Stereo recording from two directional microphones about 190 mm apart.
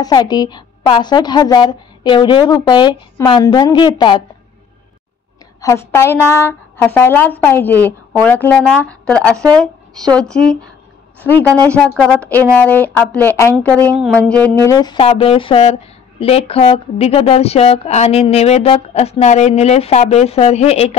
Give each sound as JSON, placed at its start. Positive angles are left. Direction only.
{"t": 0.0, "sound": "a woman's voice", "side_deg": 20}
{"t": 5.6, "sound": "a woman's voice", "side_deg": 15}